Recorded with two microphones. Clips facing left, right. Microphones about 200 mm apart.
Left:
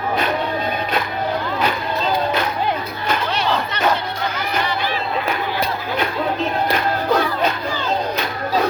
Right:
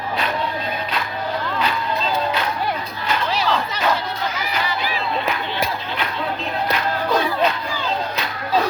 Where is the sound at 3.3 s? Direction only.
Centre (ahead or behind).